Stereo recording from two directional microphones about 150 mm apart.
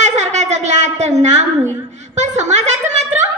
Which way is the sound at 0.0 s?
50° right (ahead or behind).